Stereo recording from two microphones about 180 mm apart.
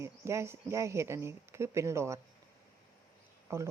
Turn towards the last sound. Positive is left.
turn(degrees=-15)  # may be behind; listen again after turning